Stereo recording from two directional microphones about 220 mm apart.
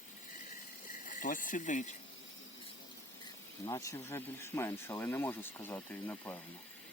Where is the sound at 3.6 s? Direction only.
15° left (ahead or behind).